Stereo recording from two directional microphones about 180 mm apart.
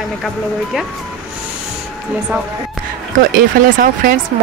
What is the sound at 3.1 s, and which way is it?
Speech, 50° right (ahead or behind).